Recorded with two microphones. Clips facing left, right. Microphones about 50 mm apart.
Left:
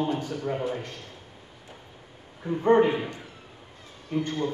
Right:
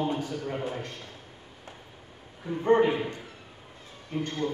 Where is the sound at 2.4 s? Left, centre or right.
Centre.